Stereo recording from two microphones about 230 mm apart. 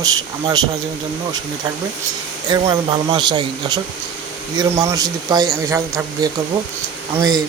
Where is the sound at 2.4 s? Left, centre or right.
Centre.